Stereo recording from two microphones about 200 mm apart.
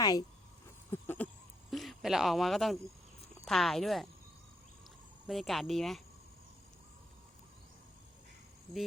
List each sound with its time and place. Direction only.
0.0 s speech: 20° left (ahead or behind)
0.9 s a sound: 10° left (ahead or behind)
1.7 s speech: centre (ahead or behind)
5.2 s speech: centre (ahead or behind)